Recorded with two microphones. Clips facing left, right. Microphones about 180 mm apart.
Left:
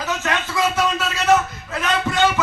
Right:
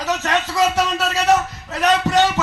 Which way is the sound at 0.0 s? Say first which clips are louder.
Right 3 dB; 35° right (ahead or behind).